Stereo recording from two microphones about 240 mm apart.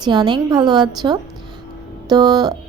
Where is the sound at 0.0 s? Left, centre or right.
Centre.